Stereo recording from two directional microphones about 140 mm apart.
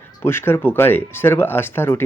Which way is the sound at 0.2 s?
15° left (ahead or behind).